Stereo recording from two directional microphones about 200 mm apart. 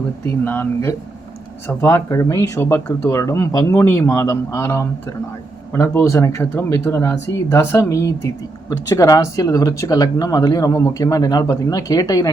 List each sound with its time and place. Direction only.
0.3 s speech: 10° left (ahead or behind)